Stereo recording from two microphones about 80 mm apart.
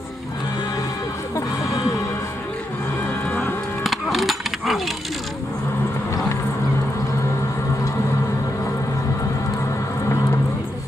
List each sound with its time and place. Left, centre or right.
1.3 s music: left
3.8 s music: centre